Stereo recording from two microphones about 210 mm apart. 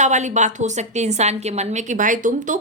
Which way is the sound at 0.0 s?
35° right (ahead or behind).